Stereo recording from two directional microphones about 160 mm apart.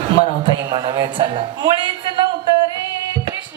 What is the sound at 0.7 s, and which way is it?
A woman's voice, 25° right (ahead or behind).